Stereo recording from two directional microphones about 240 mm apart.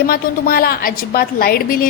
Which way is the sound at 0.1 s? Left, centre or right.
Left.